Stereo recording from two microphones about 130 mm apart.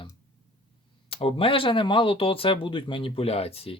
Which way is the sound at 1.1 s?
45° left (ahead or behind).